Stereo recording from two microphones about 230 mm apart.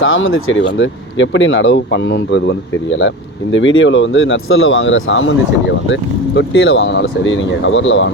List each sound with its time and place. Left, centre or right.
0.0 s speech: left